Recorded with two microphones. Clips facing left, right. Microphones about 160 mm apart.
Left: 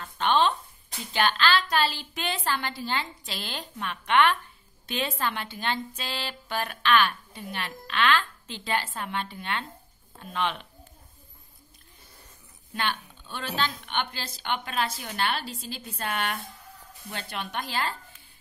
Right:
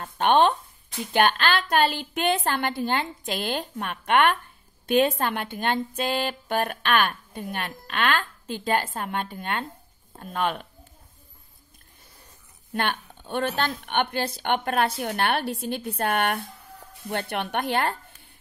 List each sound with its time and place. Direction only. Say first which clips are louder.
0.0 s a sound: right 4 dB; 55° right (ahead or behind)
1.1 s speech: right 3 dB; 55° right (ahead or behind)
12.7 s a woman's voice: right 3 dB; 55° right (ahead or behind)